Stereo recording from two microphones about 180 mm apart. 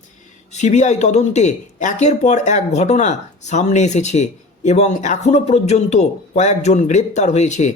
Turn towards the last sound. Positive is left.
turn(degrees=40)  # may be behind; listen again after turning